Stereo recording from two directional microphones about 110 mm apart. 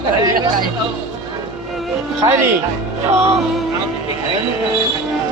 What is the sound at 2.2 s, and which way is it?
Speech, 40° right (ahead or behind).